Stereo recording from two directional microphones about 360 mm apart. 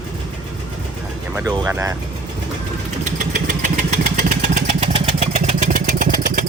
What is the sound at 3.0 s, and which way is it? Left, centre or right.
Vehicle, right.